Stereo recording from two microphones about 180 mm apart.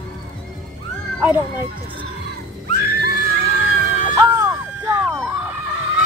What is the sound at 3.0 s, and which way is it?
Screaming, 60° right (ahead or behind).